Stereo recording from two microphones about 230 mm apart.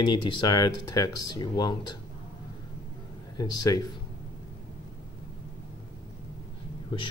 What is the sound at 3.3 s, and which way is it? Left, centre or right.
Speech, centre.